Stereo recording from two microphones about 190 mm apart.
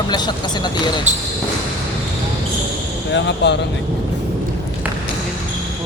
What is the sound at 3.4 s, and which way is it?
Speech, 65° left (ahead or behind).